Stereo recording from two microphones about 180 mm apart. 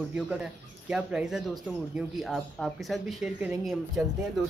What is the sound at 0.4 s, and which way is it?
Speech, 5° right (ahead or behind).